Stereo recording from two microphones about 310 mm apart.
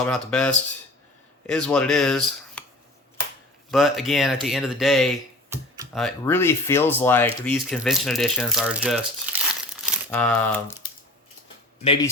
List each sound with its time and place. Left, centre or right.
0.0 s speech: centre
3.7 s speech: centre
9.8 s crumpling: centre
11.8 s speech: centre